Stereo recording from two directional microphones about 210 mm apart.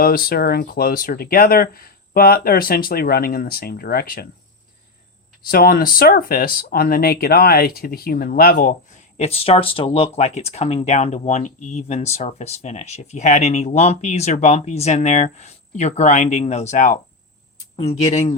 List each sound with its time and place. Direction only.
0.0 s speech: 45° left (ahead or behind)
5.5 s speech: 45° left (ahead or behind)
9.1 s speech: 30° left (ahead or behind)